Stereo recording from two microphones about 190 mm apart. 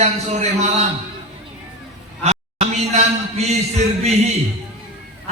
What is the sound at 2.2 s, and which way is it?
Speech, 35° right (ahead or behind).